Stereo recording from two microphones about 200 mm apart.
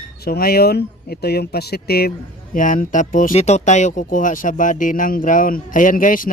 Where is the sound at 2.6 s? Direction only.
40° left (ahead or behind).